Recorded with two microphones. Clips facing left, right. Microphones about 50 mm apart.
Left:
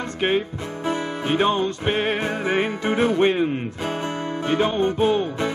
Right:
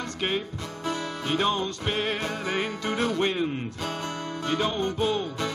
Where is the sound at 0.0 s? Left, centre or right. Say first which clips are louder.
Left 7 dB; left.